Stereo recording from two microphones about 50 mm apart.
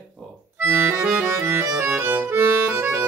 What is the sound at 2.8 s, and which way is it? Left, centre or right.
Accordion, right.